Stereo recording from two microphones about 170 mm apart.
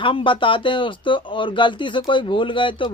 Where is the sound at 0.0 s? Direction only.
30° left (ahead or behind).